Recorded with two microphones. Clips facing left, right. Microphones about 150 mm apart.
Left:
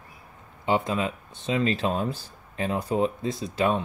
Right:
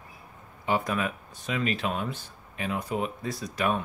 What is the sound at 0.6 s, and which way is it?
Speech, 25° left (ahead or behind).